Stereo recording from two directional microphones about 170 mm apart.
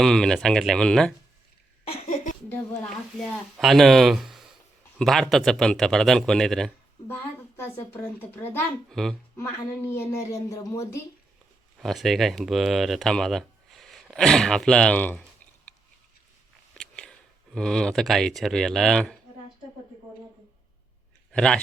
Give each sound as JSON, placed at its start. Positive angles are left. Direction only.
{"t": 0.0, "sound": "a man's voice", "side_deg": 5}
{"t": 1.9, "sound": "a sound", "side_deg": 40}
{"t": 3.2, "sound": "a man's voice", "side_deg": 0}
{"t": 7.1, "sound": "a sound", "side_deg": 10}
{"t": 7.9, "sound": "a woman's voice", "side_deg": 10}
{"t": 9.4, "sound": "a woman's voice", "side_deg": 15}
{"t": 11.8, "sound": "speech", "side_deg": 0}
{"t": 16.7, "sound": "speech", "side_deg": 5}
{"t": 21.3, "sound": "speech", "side_deg": 5}